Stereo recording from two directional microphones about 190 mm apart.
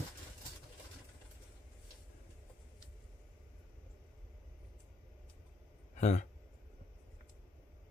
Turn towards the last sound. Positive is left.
turn(degrees=35)  # may be behind; listen again after turning